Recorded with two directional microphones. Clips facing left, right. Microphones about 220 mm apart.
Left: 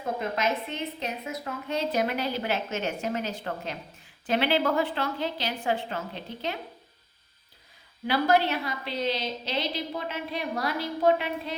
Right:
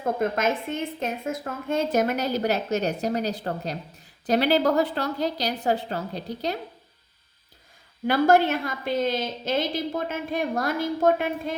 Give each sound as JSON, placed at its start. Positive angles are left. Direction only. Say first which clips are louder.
{"t": 0.0, "sound": "a woman's voice", "louder": "right 5 dB", "side_deg": -50}
{"t": 8.0, "sound": "a woman's voice", "louder": "right 5 dB", "side_deg": -50}